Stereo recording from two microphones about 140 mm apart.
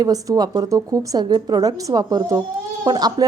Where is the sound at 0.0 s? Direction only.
25° right (ahead or behind).